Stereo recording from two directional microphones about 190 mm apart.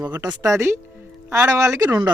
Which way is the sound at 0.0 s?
20° right (ahead or behind).